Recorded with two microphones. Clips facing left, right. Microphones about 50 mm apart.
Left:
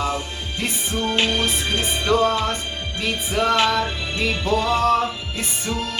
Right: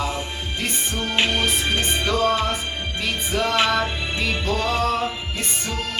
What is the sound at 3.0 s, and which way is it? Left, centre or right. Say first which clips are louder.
Music: left 2 dB; centre.